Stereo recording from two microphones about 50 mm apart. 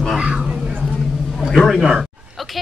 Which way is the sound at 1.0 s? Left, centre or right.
Centre.